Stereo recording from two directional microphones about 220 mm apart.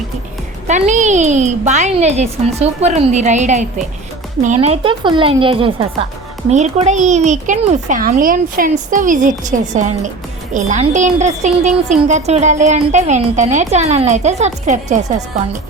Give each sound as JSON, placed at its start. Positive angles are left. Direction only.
{"t": 0.7, "sound": "a woman's voice", "side_deg": -30}